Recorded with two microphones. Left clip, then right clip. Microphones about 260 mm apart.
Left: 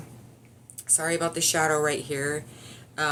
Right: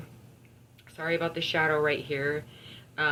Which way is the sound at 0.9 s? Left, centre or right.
Left.